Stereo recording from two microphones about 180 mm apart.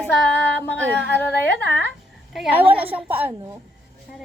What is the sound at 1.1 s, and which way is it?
Speech, 70° left (ahead or behind).